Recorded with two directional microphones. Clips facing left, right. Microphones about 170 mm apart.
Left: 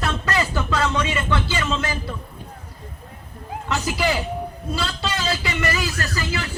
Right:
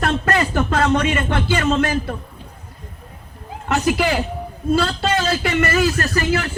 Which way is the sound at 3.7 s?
50° right (ahead or behind).